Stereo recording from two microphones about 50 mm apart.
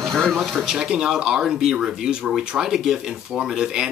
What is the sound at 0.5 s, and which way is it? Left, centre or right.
Speech, centre.